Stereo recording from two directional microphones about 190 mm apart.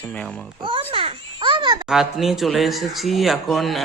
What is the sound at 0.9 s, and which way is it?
Babbling, 30° right (ahead or behind).